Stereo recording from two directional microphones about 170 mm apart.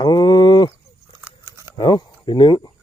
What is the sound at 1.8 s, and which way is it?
Speech, 25° left (ahead or behind).